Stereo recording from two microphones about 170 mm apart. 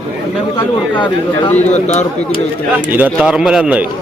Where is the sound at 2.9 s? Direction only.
10° right (ahead or behind).